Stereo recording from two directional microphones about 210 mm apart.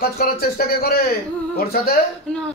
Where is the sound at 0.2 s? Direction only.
45° left (ahead or behind).